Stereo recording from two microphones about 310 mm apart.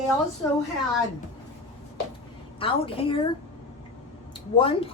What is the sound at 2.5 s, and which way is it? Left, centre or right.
Speech, centre.